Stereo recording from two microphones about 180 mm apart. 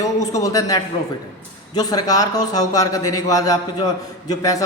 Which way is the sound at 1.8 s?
20° left (ahead or behind).